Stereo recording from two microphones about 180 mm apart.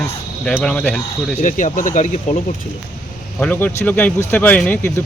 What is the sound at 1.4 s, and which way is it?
Speech, 45° left (ahead or behind).